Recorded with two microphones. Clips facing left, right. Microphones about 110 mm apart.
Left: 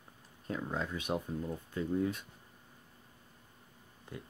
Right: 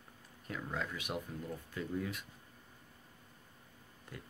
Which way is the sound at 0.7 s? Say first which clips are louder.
Left 3 dB; 30° left (ahead or behind).